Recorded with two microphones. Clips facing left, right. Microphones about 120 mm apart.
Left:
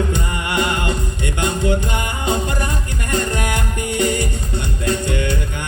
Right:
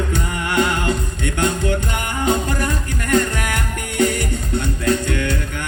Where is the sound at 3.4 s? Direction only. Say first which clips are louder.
Left 2 dB; 15° left (ahead or behind).